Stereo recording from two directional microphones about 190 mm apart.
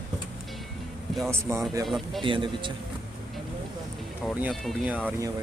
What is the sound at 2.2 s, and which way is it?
Speech, 25° right (ahead or behind).